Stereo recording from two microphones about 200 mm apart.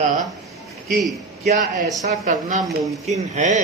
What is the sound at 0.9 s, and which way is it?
Speech, centre (ahead or behind).